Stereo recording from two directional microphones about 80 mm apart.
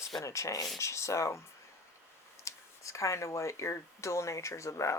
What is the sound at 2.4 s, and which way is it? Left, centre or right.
Speech, left.